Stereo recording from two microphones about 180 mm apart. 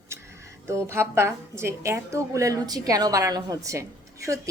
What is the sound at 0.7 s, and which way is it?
A woman's voice, 15° right (ahead or behind).